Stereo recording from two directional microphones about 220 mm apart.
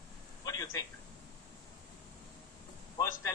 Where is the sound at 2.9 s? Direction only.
15° left (ahead or behind).